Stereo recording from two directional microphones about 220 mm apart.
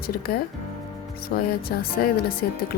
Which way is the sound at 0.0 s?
45° left (ahead or behind).